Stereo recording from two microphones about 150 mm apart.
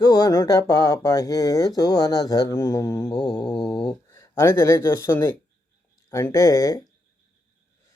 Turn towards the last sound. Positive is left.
turn(degrees=25)  # may be behind; listen again after turning